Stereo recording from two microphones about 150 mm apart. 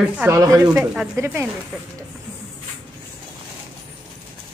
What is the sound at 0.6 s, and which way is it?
Speech, 5° right (ahead or behind).